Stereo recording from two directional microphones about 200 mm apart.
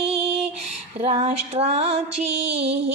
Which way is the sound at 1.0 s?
35° right (ahead or behind).